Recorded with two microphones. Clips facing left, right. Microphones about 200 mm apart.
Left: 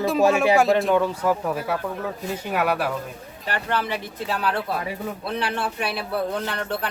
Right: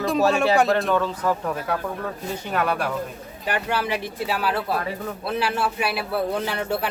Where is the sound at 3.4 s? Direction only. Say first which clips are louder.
Right 1 dB; 10° right (ahead or behind).